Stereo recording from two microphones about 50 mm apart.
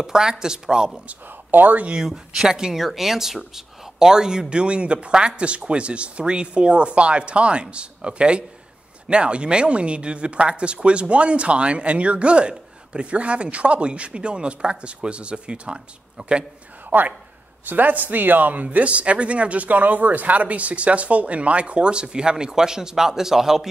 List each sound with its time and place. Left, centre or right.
0.0 s speech: centre
1.5 s speech: right
2.0 s speech: centre
16.9 s speech: right; by 23.7 s centre